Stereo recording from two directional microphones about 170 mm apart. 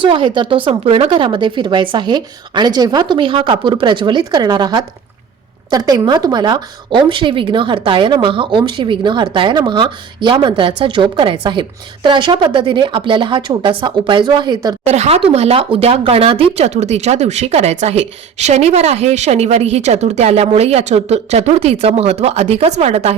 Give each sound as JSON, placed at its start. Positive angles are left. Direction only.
{"t": 0.0, "sound": "speech", "side_deg": -30}
{"t": 14.8, "sound": "speech", "side_deg": -40}